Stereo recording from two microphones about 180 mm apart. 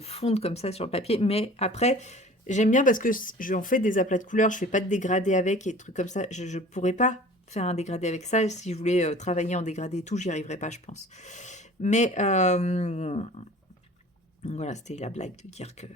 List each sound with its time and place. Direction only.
0.0 s speech: 35° left (ahead or behind)
14.4 s speech: 40° left (ahead or behind)